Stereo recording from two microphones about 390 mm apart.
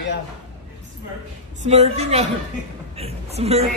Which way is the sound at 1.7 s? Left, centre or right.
Centre.